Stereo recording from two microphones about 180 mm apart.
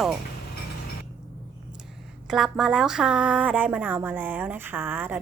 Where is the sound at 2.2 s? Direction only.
Centre (ahead or behind).